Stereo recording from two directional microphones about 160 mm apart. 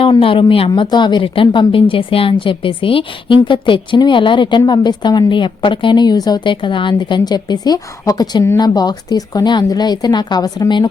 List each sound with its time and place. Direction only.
0.0 s a woman's voice: 35° left (ahead or behind)